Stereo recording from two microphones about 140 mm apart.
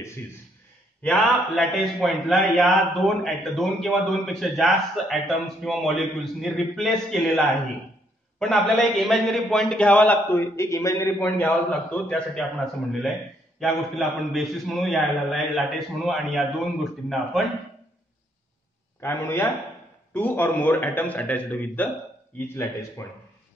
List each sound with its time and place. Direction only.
1.0 s a man's voice: 5° left (ahead or behind)
18.9 s a man's voice: 15° left (ahead or behind)